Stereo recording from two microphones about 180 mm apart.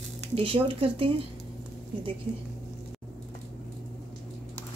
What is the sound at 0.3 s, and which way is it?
Speech, 30° right (ahead or behind).